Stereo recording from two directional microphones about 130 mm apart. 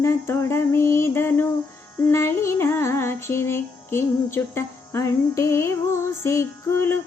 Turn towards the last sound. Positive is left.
turn(degrees=20)  # may be behind; listen again after turning